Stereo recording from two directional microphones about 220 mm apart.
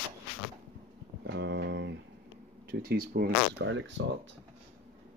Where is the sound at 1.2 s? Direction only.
50° right (ahead or behind).